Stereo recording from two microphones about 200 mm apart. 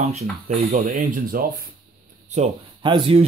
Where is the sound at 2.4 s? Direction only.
35° right (ahead or behind).